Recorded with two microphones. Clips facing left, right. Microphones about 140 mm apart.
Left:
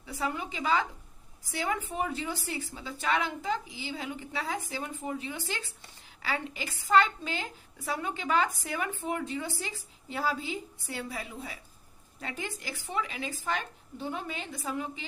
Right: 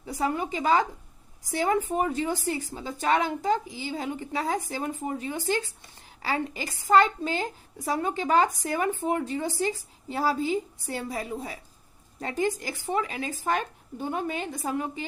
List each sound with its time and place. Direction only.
0.0 s a woman's voice: 40° right (ahead or behind)